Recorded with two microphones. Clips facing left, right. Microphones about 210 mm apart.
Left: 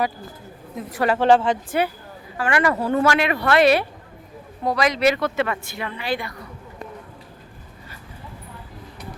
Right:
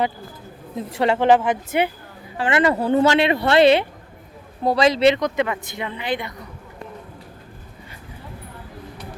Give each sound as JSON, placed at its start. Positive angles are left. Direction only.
{"t": 0.8, "sound": "speech", "side_deg": -25}